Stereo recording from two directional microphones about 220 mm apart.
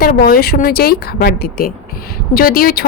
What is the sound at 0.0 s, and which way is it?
A woman's voice, 40° left (ahead or behind).